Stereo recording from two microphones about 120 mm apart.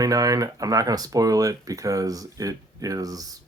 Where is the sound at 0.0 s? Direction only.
30° right (ahead or behind).